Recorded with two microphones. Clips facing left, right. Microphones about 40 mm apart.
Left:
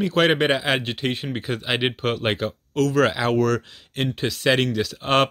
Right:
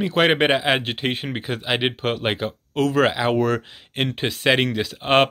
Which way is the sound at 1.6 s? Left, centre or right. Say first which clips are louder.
Right 1 dB; centre.